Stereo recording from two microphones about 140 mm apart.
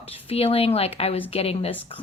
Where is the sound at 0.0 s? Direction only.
45° left (ahead or behind).